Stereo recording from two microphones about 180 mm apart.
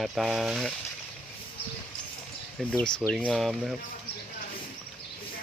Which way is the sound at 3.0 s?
5° left (ahead or behind).